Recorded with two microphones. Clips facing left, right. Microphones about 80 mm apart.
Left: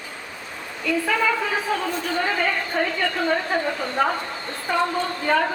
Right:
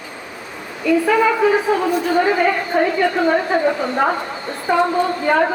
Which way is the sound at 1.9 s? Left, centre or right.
Centre.